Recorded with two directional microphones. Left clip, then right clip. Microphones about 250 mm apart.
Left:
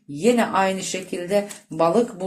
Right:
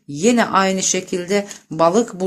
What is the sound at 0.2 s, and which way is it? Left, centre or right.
Speech, right.